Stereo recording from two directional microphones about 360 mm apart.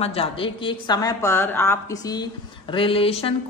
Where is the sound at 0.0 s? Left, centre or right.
Centre.